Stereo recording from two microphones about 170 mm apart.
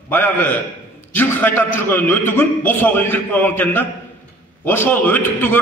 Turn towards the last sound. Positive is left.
turn(degrees=10)  # may be behind; listen again after turning